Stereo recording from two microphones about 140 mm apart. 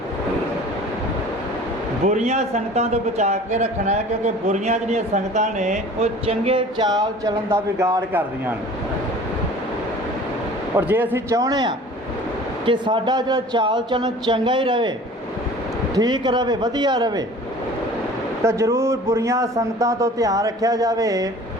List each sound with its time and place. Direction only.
2.0 s a man's voice: 55° right (ahead or behind)
6.7 s a man's voice: 25° right (ahead or behind)
10.8 s a man's voice: 15° right (ahead or behind); by 14.9 s 35° right (ahead or behind)
16.0 s speech: 30° right (ahead or behind)
18.4 s a man's voice: 20° right (ahead or behind)